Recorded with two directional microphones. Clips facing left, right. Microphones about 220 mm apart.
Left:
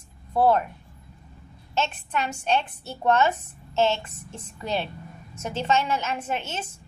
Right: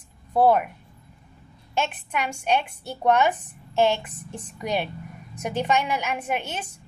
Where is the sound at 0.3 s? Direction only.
15° right (ahead or behind).